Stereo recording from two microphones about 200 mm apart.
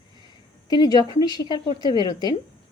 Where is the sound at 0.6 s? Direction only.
20° left (ahead or behind).